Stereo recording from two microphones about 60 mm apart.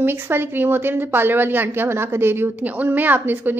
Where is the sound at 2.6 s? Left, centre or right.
Right.